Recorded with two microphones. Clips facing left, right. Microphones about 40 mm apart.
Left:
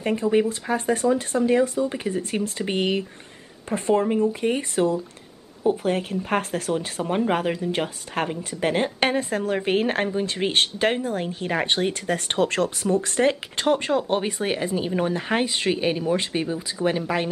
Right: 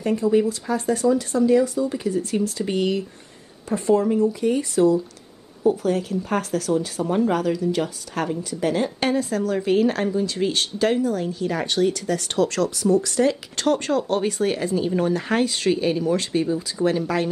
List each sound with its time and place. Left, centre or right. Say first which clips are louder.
0.0 s speech: right 2 dB; left
13.6 s speech: right 1 dB; left